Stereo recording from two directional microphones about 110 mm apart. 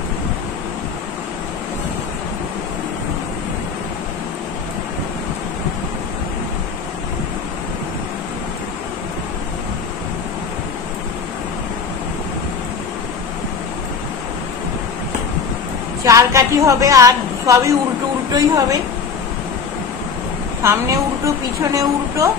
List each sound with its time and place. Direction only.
16.0 s a woman's voice: 30° right (ahead or behind)
20.6 s a woman's voice: 25° right (ahead or behind)